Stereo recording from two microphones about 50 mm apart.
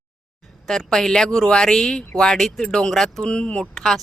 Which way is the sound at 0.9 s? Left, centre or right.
Centre.